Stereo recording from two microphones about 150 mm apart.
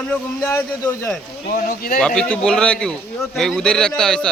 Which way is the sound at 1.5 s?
70° left (ahead or behind).